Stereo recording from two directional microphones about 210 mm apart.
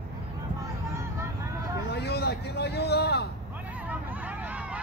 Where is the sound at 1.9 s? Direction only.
50° left (ahead or behind).